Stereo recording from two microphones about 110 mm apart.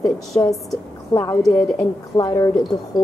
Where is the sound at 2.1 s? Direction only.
35° left (ahead or behind).